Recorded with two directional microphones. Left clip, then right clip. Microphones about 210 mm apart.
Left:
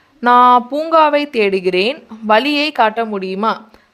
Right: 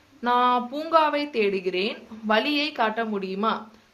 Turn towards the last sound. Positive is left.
turn(degrees=45)  # may be behind; listen again after turning